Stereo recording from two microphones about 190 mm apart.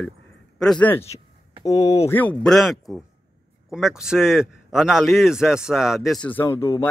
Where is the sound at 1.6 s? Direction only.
15° left (ahead or behind).